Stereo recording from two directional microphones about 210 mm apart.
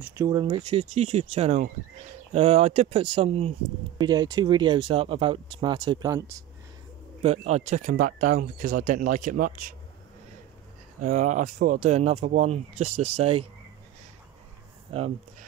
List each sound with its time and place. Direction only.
0.0 s speech: 15° right (ahead or behind)
7.2 s speech: 30° right (ahead or behind)
11.0 s speech: 35° right (ahead or behind)
14.9 s speech: 30° right (ahead or behind)